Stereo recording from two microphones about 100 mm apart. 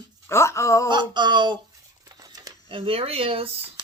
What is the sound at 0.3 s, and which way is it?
Speech, 30° left (ahead or behind).